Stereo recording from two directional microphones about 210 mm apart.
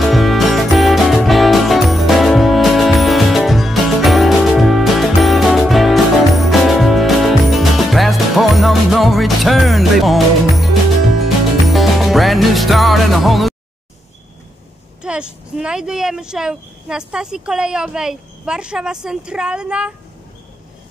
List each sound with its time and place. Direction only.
0.0 s music: centre (ahead or behind)
15.0 s speech: 5° right (ahead or behind)